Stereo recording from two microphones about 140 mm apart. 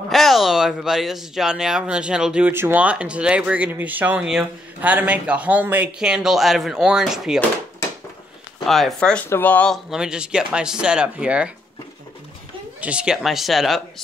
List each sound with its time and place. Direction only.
0.1 s speech: centre (ahead or behind)
8.6 s speech: centre (ahead or behind)
9.8 s speech: 5° right (ahead or behind)
12.8 s speech: 5° right (ahead or behind)